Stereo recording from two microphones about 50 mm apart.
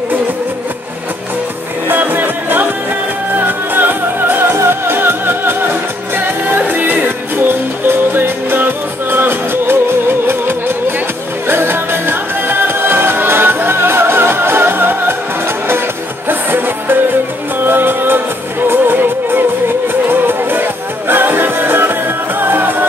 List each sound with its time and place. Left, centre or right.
1.9 s music: right
16.3 s music: right